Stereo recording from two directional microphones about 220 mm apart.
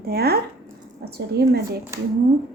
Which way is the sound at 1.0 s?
50° right (ahead or behind).